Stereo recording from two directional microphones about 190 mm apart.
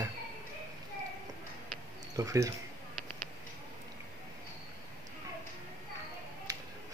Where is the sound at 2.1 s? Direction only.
15° right (ahead or behind).